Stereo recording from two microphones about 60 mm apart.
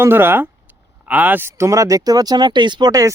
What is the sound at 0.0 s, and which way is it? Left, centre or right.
Speech, right.